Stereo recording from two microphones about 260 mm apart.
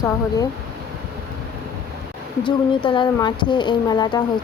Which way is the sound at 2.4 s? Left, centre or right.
Centre.